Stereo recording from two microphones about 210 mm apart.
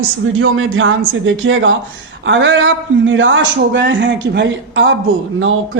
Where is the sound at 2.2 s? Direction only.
60° right (ahead or behind).